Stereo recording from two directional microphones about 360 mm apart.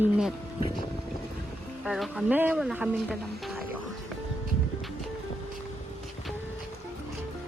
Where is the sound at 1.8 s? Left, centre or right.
Centre.